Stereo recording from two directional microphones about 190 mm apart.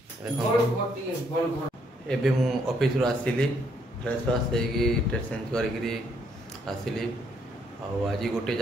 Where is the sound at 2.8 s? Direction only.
5° left (ahead or behind).